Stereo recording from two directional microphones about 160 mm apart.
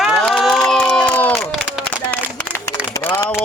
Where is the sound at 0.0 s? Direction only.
Centre (ahead or behind).